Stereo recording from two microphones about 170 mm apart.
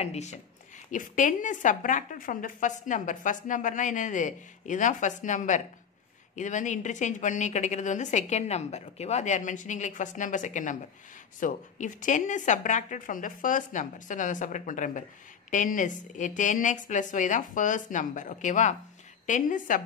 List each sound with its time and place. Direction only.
0.0 s a woman's voice: 40° left (ahead or behind)